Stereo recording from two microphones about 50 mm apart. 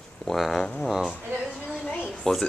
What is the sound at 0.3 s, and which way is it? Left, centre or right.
Speech, centre.